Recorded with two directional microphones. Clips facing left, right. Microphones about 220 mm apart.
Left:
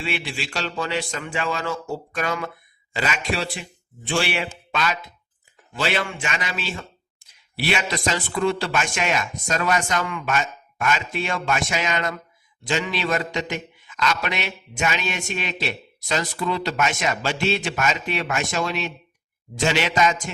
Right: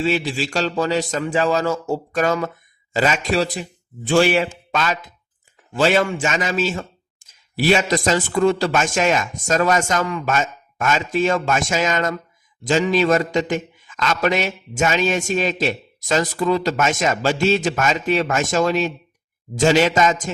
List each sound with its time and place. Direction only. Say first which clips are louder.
0.0 s a man's voice: right 8 dB; 40° right (ahead or behind)